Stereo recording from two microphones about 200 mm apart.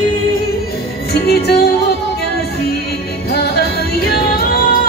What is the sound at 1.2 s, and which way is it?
Music, 55° left (ahead or behind).